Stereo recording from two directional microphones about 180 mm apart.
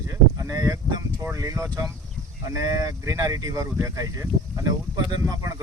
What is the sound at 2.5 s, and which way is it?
Speech, 20° right (ahead or behind).